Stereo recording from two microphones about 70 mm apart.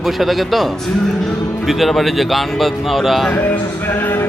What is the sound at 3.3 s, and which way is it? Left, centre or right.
Music, left.